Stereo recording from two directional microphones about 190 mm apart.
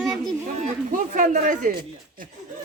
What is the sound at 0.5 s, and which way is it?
A man's voice, 40° right (ahead or behind).